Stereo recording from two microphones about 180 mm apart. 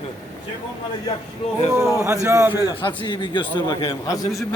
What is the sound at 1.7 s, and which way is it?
Speech, 5° right (ahead or behind).